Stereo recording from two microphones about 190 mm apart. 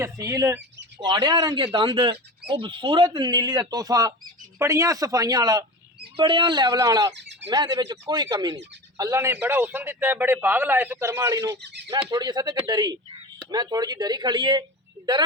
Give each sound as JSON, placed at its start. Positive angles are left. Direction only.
{"t": 0.0, "sound": "a man's voice", "side_deg": -15}
{"t": 7.1, "sound": "speech", "side_deg": -65}
{"t": 7.5, "sound": "a man's voice", "side_deg": -20}
{"t": 11.5, "sound": "speech", "side_deg": -65}
{"t": 11.9, "sound": "speech", "side_deg": -20}